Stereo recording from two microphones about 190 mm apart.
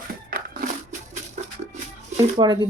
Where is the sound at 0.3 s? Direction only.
50° right (ahead or behind).